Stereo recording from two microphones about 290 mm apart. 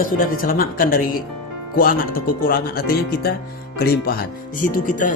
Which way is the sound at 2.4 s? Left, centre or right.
Left.